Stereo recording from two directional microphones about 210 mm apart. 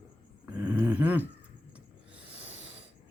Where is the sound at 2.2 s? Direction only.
60° left (ahead or behind).